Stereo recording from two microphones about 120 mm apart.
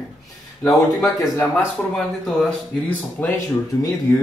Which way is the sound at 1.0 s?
20° left (ahead or behind).